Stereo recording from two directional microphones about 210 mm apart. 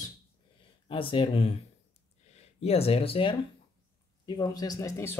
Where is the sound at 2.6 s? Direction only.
30° left (ahead or behind).